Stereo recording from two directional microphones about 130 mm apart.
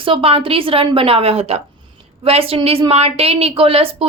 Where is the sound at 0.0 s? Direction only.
45° right (ahead or behind).